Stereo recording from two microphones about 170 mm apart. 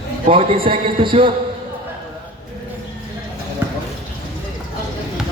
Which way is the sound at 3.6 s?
15° right (ahead or behind).